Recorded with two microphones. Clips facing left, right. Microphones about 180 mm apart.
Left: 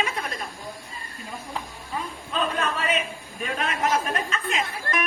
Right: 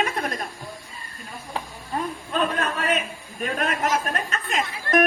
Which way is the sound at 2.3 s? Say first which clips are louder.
Right 1 dB; 50° right (ahead or behind).